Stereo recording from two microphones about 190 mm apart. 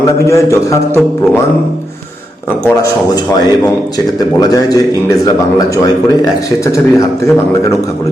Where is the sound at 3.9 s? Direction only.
20° left (ahead or behind).